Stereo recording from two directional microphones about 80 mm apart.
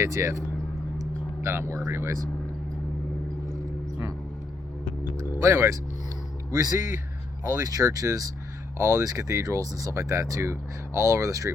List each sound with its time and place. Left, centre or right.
0.0 s speech: right
0.9 s a sound: right
1.7 s speech: right
5.3 s speech: right
6.5 s speech: right